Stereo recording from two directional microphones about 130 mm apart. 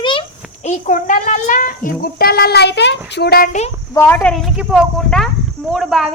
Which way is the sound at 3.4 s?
60° left (ahead or behind).